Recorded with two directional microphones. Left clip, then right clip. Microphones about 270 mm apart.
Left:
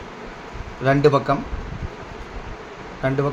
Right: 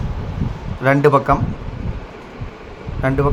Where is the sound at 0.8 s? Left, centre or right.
Centre.